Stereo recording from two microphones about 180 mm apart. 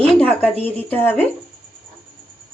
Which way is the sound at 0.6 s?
10° left (ahead or behind).